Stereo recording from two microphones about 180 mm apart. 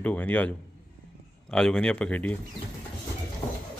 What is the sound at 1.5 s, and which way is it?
Speech, 5° left (ahead or behind).